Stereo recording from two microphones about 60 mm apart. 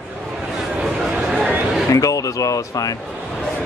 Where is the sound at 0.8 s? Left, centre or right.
Centre.